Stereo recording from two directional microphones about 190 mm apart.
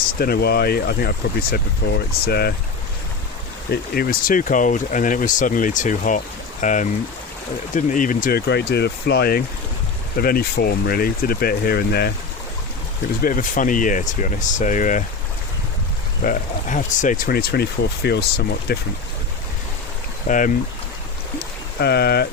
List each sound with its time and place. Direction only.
0.1 s speech: 55° left (ahead or behind)
3.7 s speech: 50° left (ahead or behind)
13.2 s speech: 45° left (ahead or behind)
16.2 s speech: 45° left (ahead or behind)
20.2 s speech: 45° left (ahead or behind)
21.3 s a sound: 60° left (ahead or behind)